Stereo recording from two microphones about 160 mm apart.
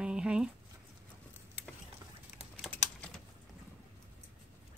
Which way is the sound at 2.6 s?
Centre (ahead or behind).